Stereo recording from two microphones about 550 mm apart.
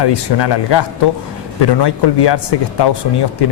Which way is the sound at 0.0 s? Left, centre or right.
Left.